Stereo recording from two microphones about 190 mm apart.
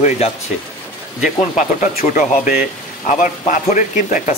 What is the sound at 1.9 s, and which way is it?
Speech, 45° left (ahead or behind).